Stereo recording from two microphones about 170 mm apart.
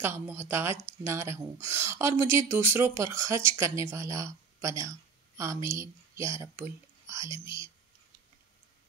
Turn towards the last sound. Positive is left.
turn(degrees=-15)  # may be behind; listen again after turning